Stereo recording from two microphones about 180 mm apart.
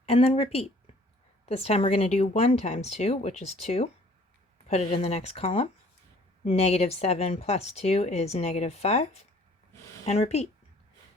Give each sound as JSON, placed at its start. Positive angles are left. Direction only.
{"t": 0.0, "sound": "speech", "side_deg": 35}
{"t": 1.5, "sound": "speech", "side_deg": 35}